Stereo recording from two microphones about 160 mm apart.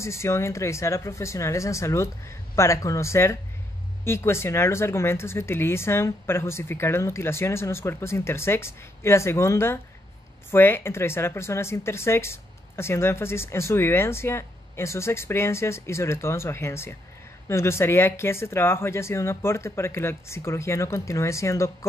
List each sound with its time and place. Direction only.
0.0 s speech: 15° left (ahead or behind)